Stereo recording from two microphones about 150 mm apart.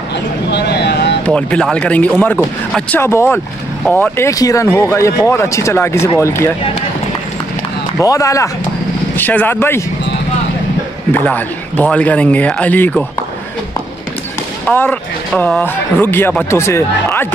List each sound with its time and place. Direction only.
0.6 s vehicle: 90° left
1.2 s speech: 5° left (ahead or behind)
8.0 s speech: 20° left (ahead or behind)
11.1 s speech: 10° left (ahead or behind)
14.7 s speech: 10° left (ahead or behind)